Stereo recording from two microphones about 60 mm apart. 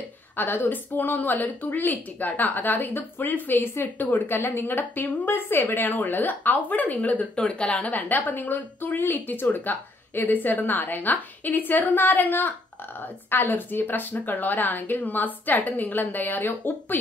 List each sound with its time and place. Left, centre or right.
0.4 s a woman's voice: left